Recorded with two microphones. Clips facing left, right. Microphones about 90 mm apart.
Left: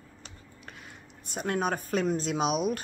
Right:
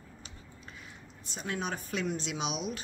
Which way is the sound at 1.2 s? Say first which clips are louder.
Left 7 dB; 50° left (ahead or behind).